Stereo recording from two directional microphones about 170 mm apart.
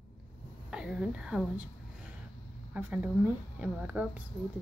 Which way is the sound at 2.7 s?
10° right (ahead or behind).